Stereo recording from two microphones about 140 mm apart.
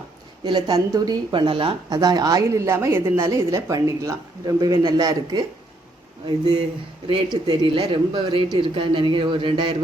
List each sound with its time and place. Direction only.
0.4 s speech: 30° right (ahead or behind)